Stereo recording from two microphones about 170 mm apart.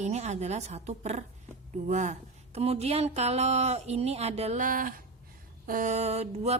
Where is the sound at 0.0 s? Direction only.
40° right (ahead or behind).